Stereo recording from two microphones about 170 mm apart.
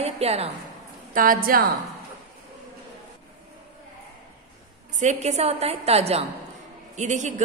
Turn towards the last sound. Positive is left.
turn(degrees=-45)  # may be behind; listen again after turning